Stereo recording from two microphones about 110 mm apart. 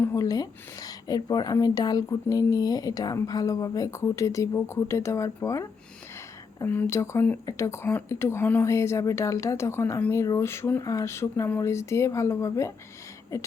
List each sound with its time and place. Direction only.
0.0 s a woman's voice: 30° left (ahead or behind)
6.7 s a woman's voice: 20° left (ahead or behind)